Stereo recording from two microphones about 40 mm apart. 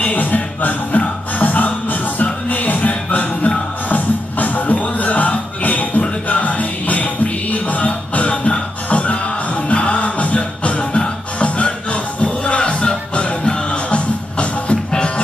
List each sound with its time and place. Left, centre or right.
0.0 s music: left